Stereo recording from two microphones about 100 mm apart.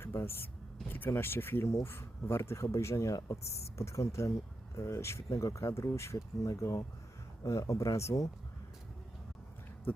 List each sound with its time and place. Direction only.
0.0 s speech: 25° left (ahead or behind)
3.4 s speech: 90° left
3.8 s speech: 30° left (ahead or behind)